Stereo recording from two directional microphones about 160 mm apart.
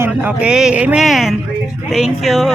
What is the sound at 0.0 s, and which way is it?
Speech, 10° right (ahead or behind).